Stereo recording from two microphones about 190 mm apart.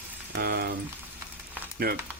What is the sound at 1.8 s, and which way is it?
Speech, 50° right (ahead or behind).